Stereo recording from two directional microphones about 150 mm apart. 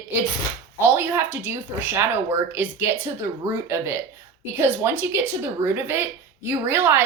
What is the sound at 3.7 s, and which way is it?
Speech, 15° right (ahead or behind).